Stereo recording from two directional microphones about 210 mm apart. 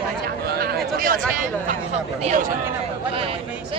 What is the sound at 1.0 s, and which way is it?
Speech, 40° right (ahead or behind).